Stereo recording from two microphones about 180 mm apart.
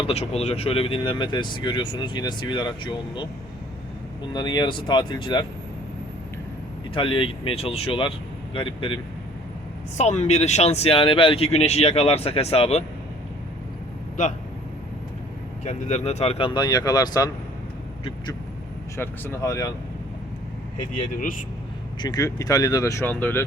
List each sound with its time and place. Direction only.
0.0 s speech: 35° left (ahead or behind)
4.3 s speech: 25° left (ahead or behind)
6.9 s speech: 30° left (ahead or behind)
10.0 s speech: 40° left (ahead or behind)
15.6 s speech: 40° left (ahead or behind)
16.6 s speech: 20° left (ahead or behind)
18.9 s speech: 15° left (ahead or behind)
21.1 s speech: 50° left (ahead or behind)
22.0 s speech: 20° left (ahead or behind)